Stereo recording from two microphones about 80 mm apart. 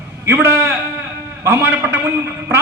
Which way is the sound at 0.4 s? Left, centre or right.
Right.